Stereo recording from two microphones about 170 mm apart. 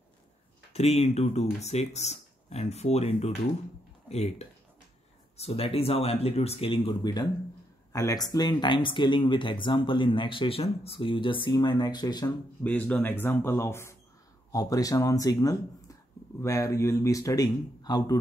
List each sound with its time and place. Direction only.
0.7 s speech: 40° left (ahead or behind)
12.6 s speech: 10° left (ahead or behind)